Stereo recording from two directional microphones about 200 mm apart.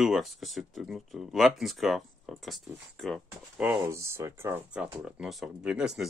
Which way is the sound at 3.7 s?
15° right (ahead or behind).